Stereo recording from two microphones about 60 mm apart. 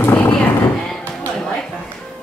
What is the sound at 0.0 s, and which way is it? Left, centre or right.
Horse, left.